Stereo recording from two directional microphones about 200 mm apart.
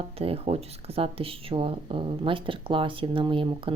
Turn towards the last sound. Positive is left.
turn(degrees=-25)  # may be behind; listen again after turning